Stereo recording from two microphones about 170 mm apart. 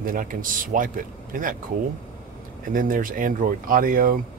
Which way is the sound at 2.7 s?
55° right (ahead or behind).